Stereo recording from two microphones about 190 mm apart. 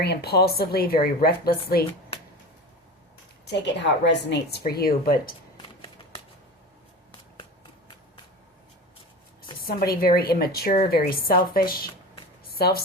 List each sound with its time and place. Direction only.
0.0 s a woman's voice: 60° left (ahead or behind)
3.4 s a woman's voice: 65° left (ahead or behind)
5.5 s shuffling cards: 30° left (ahead or behind)
9.6 s a woman's voice: 50° left (ahead or behind)
12.5 s shuffling cards: 55° left (ahead or behind)